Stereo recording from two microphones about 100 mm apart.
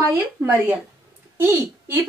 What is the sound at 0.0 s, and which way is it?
Speech, 20° right (ahead or behind).